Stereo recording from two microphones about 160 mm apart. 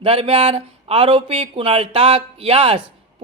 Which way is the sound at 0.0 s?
35° right (ahead or behind).